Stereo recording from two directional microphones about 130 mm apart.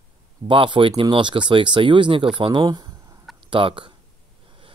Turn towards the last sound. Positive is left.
turn(degrees=-40)  # may be behind; listen again after turning